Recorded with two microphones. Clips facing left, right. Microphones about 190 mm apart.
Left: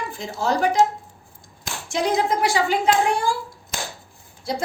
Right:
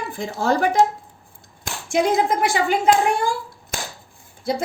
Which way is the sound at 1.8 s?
55° right (ahead or behind).